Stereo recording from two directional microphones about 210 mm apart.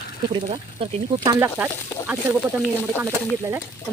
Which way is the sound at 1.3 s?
10° right (ahead or behind).